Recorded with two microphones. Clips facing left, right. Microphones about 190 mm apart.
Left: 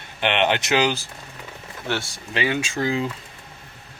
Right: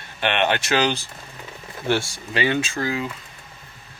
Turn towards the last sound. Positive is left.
turn(degrees=25)  # may be behind; listen again after turning